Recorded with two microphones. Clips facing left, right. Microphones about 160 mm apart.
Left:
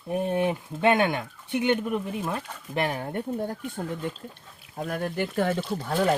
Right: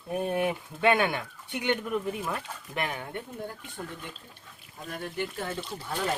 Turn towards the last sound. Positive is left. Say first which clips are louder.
# left 7 dB
turn(degrees=50)  # may be behind; listen again after turning